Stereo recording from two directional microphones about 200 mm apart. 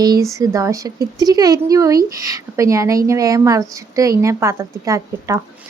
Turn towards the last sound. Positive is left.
turn(degrees=-15)  # may be behind; listen again after turning